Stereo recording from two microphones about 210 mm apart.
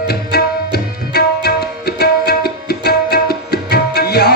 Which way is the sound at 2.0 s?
50° left (ahead or behind).